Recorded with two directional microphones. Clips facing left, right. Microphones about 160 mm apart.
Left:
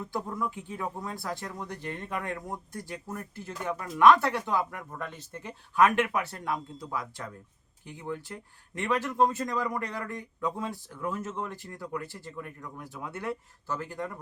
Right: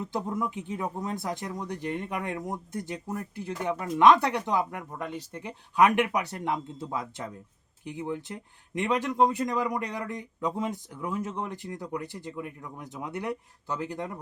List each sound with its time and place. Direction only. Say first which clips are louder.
0.0 s speech: right 2 dB; 20° right (ahead or behind)